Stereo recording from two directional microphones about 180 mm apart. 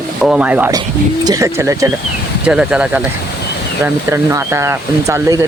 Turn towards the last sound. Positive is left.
turn(degrees=-15)  # may be behind; listen again after turning